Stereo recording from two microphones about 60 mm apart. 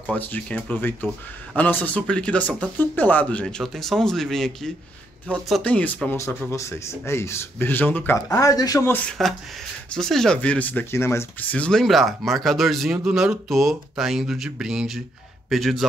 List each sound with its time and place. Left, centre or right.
0.0 s speech: left
3.6 s speech: centre
5.6 s speech: left
6.1 s speech: left
7.5 s speech: left
8.3 s speech: left
9.2 s speech: centre
10.3 s speech: centre
10.9 s speech: left
11.3 s speech: left
11.7 s speech: centre
15.5 s speech: centre